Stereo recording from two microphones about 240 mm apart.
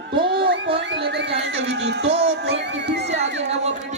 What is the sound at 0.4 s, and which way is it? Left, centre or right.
Music, right.